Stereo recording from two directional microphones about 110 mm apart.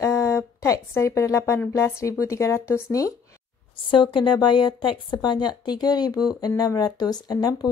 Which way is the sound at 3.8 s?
50° left (ahead or behind).